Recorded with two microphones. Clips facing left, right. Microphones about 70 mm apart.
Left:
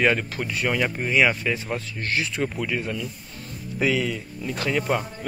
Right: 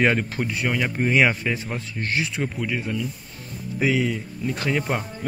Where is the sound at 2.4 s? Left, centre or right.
Centre.